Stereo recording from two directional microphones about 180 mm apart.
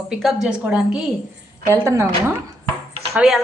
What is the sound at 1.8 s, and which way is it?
Speech, 15° right (ahead or behind).